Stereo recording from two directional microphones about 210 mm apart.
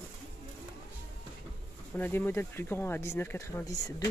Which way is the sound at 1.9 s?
10° left (ahead or behind).